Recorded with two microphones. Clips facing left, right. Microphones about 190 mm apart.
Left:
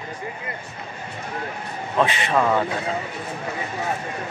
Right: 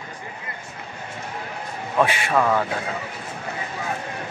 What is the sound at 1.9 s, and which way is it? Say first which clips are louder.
Speech: even; 10° right (ahead or behind).